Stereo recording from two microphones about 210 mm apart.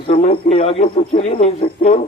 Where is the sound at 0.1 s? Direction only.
30° left (ahead or behind).